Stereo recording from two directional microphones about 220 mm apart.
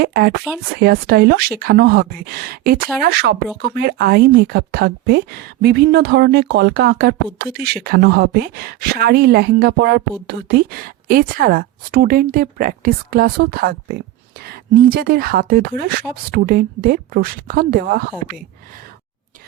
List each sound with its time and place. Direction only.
0.0 s speech: 45° right (ahead or behind)